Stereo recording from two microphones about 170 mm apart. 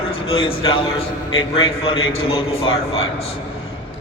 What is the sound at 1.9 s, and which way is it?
A man's voice, 30° left (ahead or behind).